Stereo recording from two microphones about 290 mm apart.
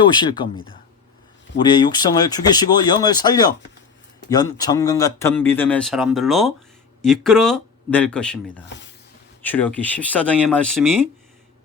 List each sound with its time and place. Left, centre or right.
0.0 s speech: centre